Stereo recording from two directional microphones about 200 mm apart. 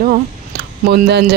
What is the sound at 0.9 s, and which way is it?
Speech, 55° right (ahead or behind).